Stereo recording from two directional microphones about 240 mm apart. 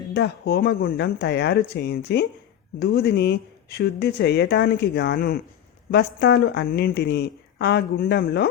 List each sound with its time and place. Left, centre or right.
0.1 s a woman's voice: left